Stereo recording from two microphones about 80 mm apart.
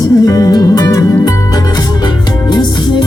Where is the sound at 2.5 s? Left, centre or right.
Left.